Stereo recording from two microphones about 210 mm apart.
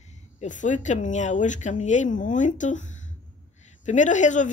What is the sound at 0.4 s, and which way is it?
A man's voice, 35° left (ahead or behind).